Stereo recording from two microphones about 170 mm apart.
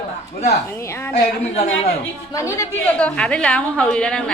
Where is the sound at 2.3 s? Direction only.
15° left (ahead or behind).